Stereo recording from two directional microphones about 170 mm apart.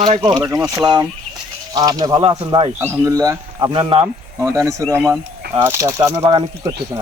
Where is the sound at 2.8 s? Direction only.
15° right (ahead or behind).